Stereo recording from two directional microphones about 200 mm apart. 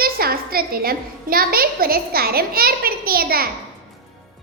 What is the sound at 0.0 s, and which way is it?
A woman's voice, 50° right (ahead or behind).